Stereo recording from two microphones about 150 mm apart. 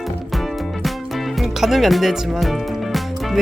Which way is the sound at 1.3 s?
Centre (ahead or behind).